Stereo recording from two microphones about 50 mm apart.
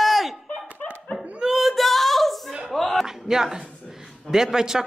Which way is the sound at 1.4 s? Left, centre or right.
Centre.